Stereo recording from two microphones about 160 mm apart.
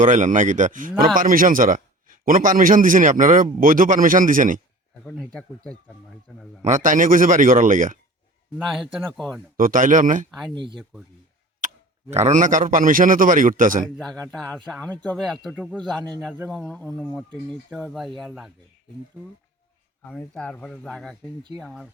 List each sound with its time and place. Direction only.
0.0 s a man's voice: 50° right (ahead or behind)
5.1 s speech: 5° left (ahead or behind)
6.6 s speech: 50° right (ahead or behind)
8.5 s speech: centre (ahead or behind)
9.6 s a man's voice: 60° right (ahead or behind)
10.5 s speech: 30° right (ahead or behind)
11.6 s tick-tock: 55° right (ahead or behind)
12.1 s a man's voice: 45° right (ahead or behind)
13.9 s speech: centre (ahead or behind)
15.5 s speech: 5° right (ahead or behind)
15.8 s speech: 5° left (ahead or behind)
20.0 s speech: 5° left (ahead or behind)